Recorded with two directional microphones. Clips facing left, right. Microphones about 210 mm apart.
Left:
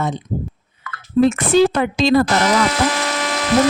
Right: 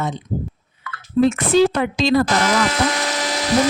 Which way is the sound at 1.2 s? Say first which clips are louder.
Left 1 dB; 50° left (ahead or behind).